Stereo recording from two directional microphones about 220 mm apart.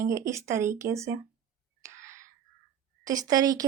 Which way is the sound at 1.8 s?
15° right (ahead or behind).